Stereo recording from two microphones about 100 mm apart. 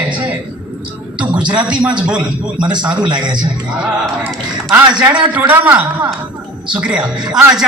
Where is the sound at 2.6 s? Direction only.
45° right (ahead or behind).